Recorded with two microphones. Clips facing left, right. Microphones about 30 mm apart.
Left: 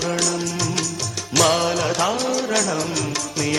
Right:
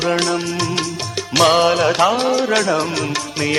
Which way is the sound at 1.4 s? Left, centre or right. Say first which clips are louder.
Right 5 dB; right.